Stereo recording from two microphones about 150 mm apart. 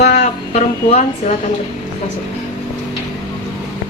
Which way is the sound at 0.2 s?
50° left (ahead or behind).